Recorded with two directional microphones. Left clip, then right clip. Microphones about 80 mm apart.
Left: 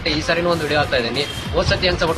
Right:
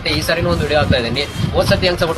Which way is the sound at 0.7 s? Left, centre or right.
Left.